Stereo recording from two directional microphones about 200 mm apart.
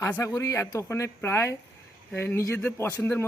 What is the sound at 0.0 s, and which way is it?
Speech, 15° left (ahead or behind).